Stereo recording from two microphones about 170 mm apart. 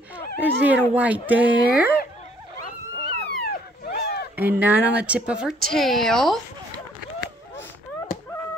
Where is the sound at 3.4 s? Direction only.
70° left (ahead or behind).